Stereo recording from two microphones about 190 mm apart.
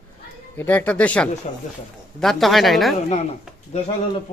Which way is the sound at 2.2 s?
Centre (ahead or behind).